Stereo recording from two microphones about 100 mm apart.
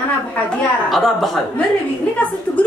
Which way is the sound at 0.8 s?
Centre (ahead or behind).